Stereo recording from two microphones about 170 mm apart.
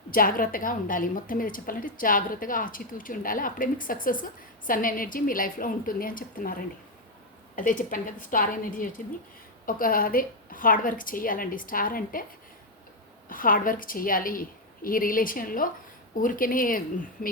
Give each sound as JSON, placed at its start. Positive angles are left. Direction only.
{"t": 0.1, "sound": "a woman's voice", "side_deg": 55}
{"t": 13.2, "sound": "a woman's voice", "side_deg": 55}